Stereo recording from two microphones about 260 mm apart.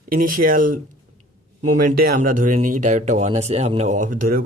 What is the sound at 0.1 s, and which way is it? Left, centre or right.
Speech, right.